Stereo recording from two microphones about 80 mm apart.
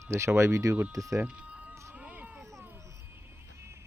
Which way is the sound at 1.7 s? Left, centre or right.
Right.